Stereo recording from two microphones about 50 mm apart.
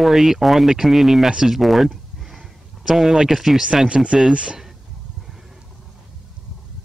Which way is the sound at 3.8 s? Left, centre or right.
Centre.